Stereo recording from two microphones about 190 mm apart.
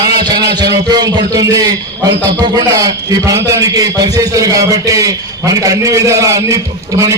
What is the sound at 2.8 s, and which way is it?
A man's voice, 20° right (ahead or behind).